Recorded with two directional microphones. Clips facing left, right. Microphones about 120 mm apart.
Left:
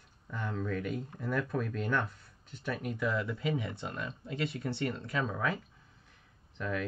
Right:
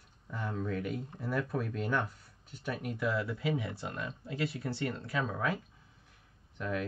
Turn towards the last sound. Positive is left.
turn(degrees=-10)  # may be behind; listen again after turning